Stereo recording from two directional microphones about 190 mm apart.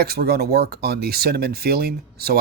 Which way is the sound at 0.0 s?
55° right (ahead or behind).